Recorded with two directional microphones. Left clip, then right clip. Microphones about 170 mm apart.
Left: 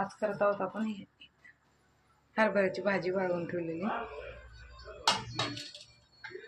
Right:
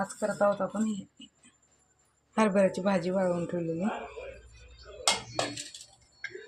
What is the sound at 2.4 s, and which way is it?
Speech, 55° right (ahead or behind).